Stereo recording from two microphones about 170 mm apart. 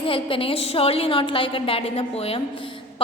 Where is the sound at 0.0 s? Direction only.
30° left (ahead or behind).